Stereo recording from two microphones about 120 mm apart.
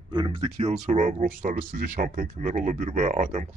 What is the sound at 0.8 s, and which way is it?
Speech, 90° right.